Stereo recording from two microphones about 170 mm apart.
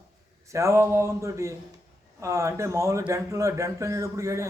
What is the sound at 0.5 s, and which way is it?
Speech, 15° right (ahead or behind).